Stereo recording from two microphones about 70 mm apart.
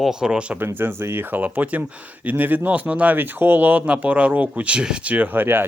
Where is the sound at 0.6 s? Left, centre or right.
Right.